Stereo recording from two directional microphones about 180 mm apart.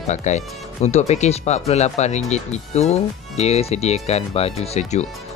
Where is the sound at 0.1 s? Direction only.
40° left (ahead or behind).